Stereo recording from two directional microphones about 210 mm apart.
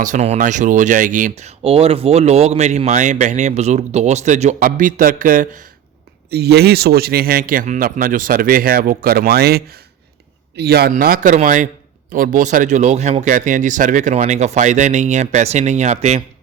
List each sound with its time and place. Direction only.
0.0 s a man's voice: 35° right (ahead or behind)